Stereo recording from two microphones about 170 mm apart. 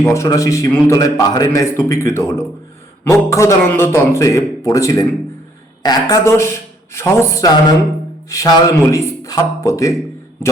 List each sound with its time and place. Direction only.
0.0 s a man's voice: 15° left (ahead or behind)